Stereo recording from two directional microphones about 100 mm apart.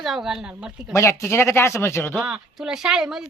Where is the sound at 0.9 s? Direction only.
25° left (ahead or behind).